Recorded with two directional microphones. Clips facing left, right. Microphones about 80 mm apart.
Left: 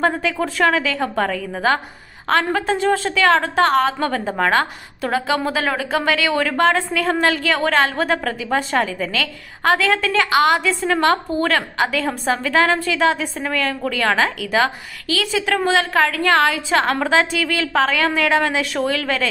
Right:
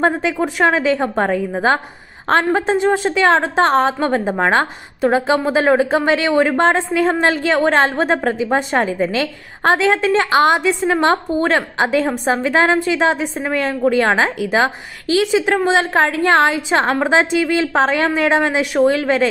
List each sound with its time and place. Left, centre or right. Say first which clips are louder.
0.0 s a woman's voice: right 3 dB; right